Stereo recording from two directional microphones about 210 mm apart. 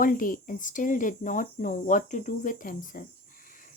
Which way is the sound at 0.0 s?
40° left (ahead or behind).